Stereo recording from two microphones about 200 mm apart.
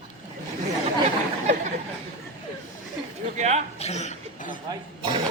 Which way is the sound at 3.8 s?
35° left (ahead or behind).